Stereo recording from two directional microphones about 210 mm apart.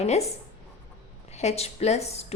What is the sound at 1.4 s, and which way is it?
Speech, 30° left (ahead or behind).